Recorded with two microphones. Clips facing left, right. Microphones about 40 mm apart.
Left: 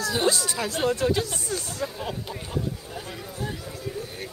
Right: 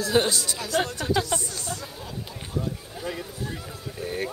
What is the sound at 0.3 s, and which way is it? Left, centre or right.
Speech, left.